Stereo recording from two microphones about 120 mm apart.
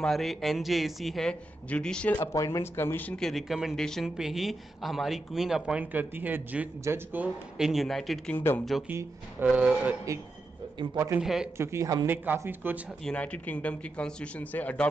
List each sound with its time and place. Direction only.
0.0 s speech: centre (ahead or behind)
2.1 s speech: 25° left (ahead or behind); by 7.6 s 15° right (ahead or behind)
7.6 s speech: centre (ahead or behind)
8.3 s speech: 15° left (ahead or behind)
8.8 s speech: 15° right (ahead or behind)
11.1 s speech: 5° right (ahead or behind)
11.5 s speech: 20° right (ahead or behind)
12.1 s speech: 15° right (ahead or behind)
13.0 s speech: 10° left (ahead or behind)